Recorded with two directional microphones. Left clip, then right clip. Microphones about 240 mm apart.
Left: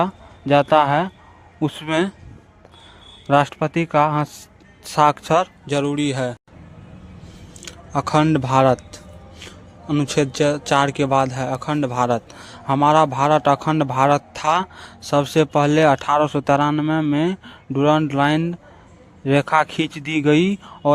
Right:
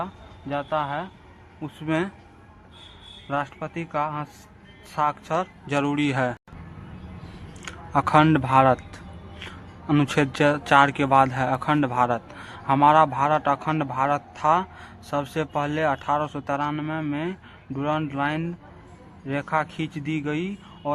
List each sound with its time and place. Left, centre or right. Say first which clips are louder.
0.0 s a man's voice: left 11 dB; left
3.2 s speech: left 11 dB; left
7.6 s speech: even; left
9.8 s speech: left 2 dB; left